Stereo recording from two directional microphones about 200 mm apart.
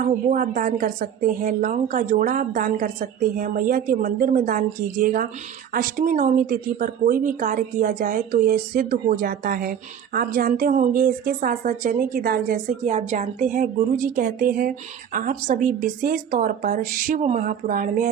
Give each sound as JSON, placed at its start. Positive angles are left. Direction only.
{"t": 0.0, "sound": "speech", "side_deg": -40}